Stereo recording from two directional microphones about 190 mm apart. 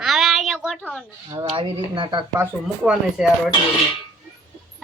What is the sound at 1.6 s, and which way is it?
Speech, 25° right (ahead or behind).